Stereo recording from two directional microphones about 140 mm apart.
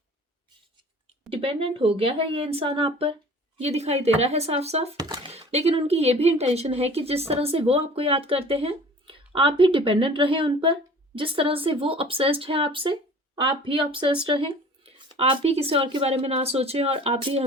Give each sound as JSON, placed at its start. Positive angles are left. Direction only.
{"t": 1.3, "sound": "speech", "side_deg": -40}
{"t": 4.9, "sound": "a sound", "side_deg": -30}
{"t": 5.3, "sound": "speech", "side_deg": -50}